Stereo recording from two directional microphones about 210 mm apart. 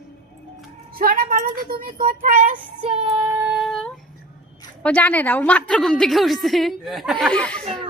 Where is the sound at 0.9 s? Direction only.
45° right (ahead or behind).